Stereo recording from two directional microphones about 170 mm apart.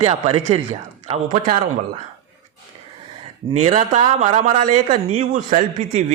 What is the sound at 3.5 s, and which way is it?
A man's voice, 40° right (ahead or behind).